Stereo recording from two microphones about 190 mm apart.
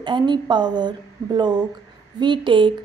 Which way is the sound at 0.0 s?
25° right (ahead or behind).